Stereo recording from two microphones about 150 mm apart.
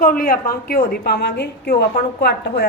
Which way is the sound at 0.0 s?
70° left (ahead or behind).